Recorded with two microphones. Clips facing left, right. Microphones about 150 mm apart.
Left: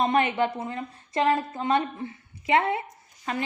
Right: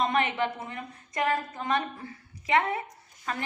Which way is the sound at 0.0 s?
30° left (ahead or behind).